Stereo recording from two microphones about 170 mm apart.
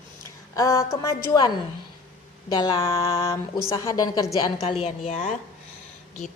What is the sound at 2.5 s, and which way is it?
A woman's voice, 20° left (ahead or behind).